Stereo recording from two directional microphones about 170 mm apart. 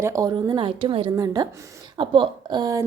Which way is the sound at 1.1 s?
20° right (ahead or behind).